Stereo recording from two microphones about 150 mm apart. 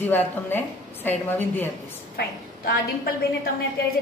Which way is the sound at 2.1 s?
90° left.